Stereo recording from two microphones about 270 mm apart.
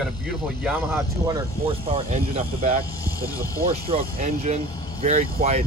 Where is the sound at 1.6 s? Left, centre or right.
Right.